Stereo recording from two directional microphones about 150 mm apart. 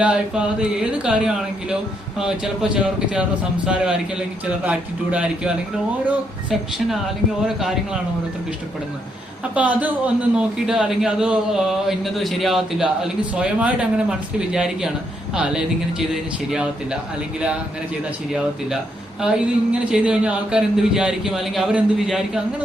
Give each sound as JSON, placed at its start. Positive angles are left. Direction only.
{"t": 0.0, "sound": "a man's voice", "side_deg": -5}
{"t": 9.4, "sound": "a man's voice", "side_deg": -10}
{"t": 18.3, "sound": "speech", "side_deg": -5}